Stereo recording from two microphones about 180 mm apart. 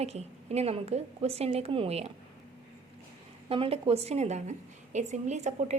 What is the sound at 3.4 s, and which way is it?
A woman's voice, 30° right (ahead or behind).